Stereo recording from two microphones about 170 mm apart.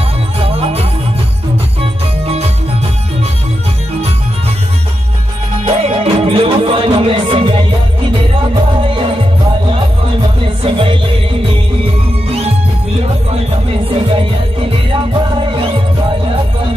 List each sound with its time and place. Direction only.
0.4 s music: 35° right (ahead or behind)
5.7 s music: 35° right (ahead or behind)
10.6 s music: 30° right (ahead or behind)
13.8 s music: 35° right (ahead or behind)